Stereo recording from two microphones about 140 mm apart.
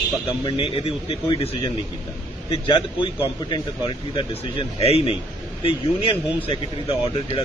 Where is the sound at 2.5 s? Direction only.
35° left (ahead or behind).